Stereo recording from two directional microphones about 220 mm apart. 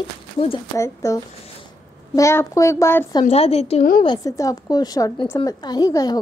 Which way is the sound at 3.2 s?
30° left (ahead or behind).